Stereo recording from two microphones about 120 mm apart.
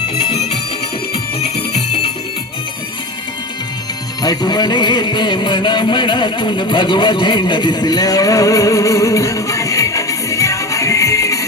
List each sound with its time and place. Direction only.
1.1 s music: 60° left (ahead or behind)
4.2 s music: 35° left (ahead or behind)